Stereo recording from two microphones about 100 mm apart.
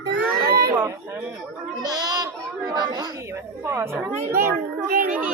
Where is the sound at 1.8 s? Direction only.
45° right (ahead or behind).